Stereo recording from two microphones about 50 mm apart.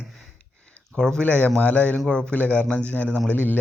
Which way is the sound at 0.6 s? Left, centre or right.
Left.